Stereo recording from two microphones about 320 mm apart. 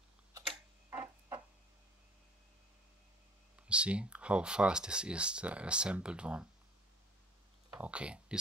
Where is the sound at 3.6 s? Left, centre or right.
Centre.